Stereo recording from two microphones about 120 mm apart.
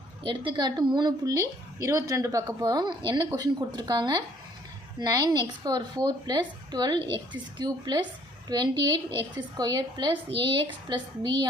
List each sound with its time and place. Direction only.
0.2 s a woman's voice: 45° right (ahead or behind)